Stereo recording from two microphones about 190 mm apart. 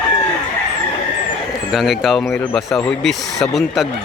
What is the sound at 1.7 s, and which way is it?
Speech, centre (ahead or behind).